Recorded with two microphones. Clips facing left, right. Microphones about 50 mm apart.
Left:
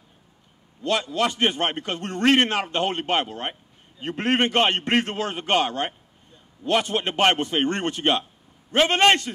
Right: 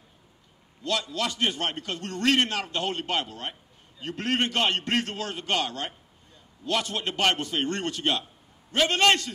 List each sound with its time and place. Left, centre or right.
0.8 s a man's voice: left